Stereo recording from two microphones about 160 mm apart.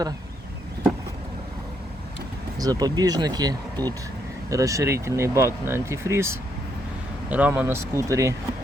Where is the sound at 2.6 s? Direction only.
25° right (ahead or behind).